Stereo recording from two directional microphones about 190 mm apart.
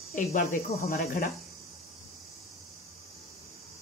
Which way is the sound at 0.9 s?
45° left (ahead or behind).